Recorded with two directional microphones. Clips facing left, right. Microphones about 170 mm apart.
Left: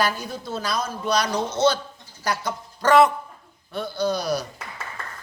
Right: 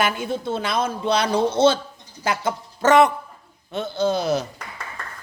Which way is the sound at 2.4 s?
20° right (ahead or behind).